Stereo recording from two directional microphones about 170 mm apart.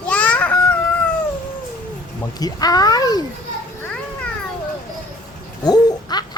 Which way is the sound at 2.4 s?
20° left (ahead or behind).